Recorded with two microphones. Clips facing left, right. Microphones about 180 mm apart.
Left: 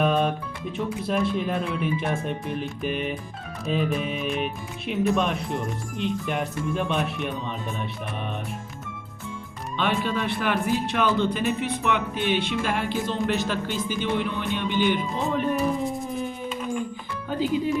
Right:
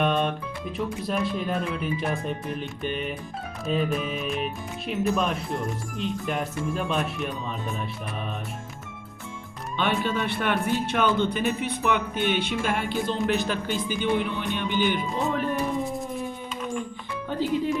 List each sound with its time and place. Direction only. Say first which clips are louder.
0.0 s a man's voice: left 2 dB; centre (ahead or behind)
9.7 s a man's voice: even; centre (ahead or behind)
17.2 s speech: left 1 dB; centre (ahead or behind)